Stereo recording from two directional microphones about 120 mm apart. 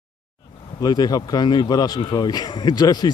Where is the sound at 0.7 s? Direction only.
35° left (ahead or behind).